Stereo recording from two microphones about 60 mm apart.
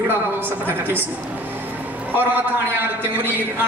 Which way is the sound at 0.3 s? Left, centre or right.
Right.